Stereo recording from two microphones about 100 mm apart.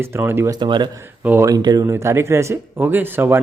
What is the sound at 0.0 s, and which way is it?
Speech, 25° right (ahead or behind).